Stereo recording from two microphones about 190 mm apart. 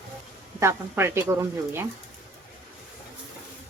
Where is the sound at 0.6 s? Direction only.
15° right (ahead or behind).